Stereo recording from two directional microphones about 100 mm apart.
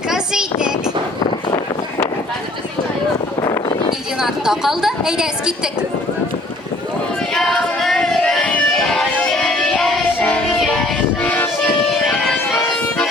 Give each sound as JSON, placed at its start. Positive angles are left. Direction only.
{"t": 0.1, "sound": "a sound", "side_deg": -5}
{"t": 3.4, "sound": "a sound", "side_deg": 40}
{"t": 4.2, "sound": "a woman's voice", "side_deg": -5}
{"t": 7.3, "sound": "music", "side_deg": 0}
{"t": 11.2, "sound": "music", "side_deg": 15}
{"t": 12.1, "sound": "music", "side_deg": 0}